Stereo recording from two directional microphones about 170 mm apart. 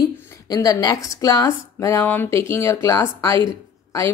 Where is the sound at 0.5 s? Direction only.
20° left (ahead or behind).